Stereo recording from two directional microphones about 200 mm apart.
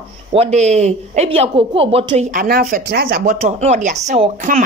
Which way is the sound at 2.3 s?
50° right (ahead or behind).